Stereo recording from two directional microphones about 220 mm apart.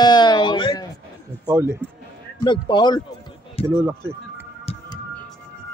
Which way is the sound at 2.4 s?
20° left (ahead or behind).